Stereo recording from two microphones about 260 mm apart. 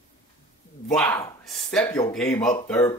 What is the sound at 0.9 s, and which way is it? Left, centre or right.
Speech, centre.